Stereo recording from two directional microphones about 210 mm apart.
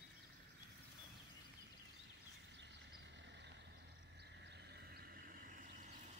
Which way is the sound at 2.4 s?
55° right (ahead or behind).